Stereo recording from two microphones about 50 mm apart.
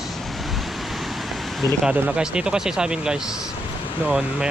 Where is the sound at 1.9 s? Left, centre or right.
Right.